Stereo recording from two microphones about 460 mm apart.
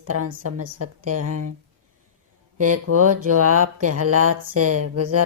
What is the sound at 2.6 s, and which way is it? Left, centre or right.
Speech, right.